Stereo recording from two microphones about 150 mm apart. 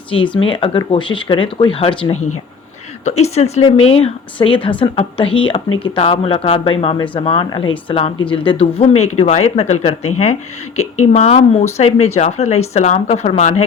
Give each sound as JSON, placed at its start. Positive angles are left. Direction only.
{"t": 0.1, "sound": "a woman's voice", "side_deg": 35}
{"t": 3.0, "sound": "a woman's voice", "side_deg": 45}